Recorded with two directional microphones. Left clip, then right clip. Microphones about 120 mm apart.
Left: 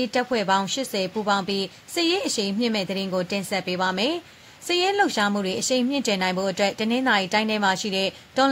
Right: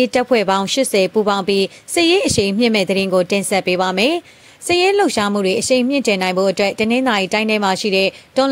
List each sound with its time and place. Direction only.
0.0 s speech: 65° right (ahead or behind)
4.6 s a woman's voice: 45° right (ahead or behind)